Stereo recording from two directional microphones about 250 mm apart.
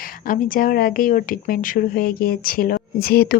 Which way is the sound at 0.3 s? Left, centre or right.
Left.